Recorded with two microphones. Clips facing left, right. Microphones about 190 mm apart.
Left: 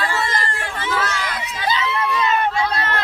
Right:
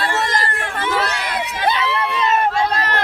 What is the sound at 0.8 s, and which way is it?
Crowd, 60° right (ahead or behind).